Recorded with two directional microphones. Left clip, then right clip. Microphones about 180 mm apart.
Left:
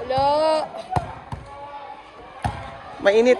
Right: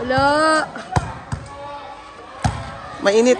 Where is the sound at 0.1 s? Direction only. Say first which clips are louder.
Right 3 dB; 45° right (ahead or behind).